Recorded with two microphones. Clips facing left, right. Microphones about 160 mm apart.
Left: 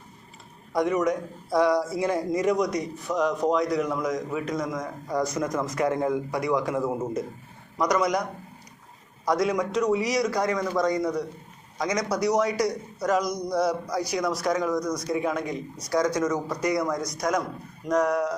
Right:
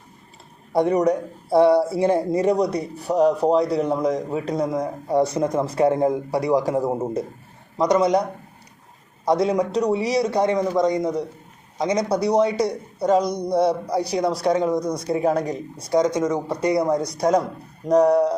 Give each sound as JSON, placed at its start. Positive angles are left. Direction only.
{"t": 0.7, "sound": "a man's voice", "side_deg": -30}
{"t": 15.9, "sound": "a man's voice", "side_deg": -25}